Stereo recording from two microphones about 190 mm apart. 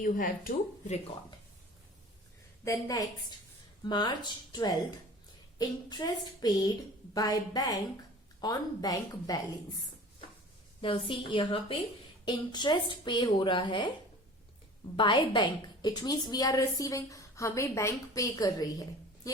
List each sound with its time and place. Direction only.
0.0 s speech: 45° left (ahead or behind)
2.6 s a woman's voice: 20° left (ahead or behind)
10.8 s a woman's voice: 25° left (ahead or behind)
14.9 s a woman's voice: 25° left (ahead or behind)